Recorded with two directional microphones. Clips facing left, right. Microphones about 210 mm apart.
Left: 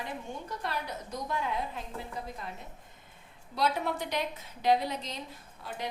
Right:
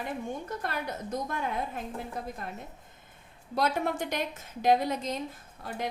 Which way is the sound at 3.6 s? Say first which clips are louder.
Right 2 dB; 50° right (ahead or behind).